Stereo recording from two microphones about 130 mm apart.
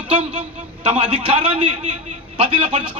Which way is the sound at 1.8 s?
65° right (ahead or behind).